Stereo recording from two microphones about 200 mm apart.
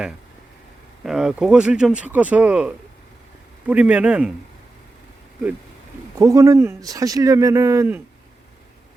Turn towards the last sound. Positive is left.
turn(degrees=-10)  # may be behind; listen again after turning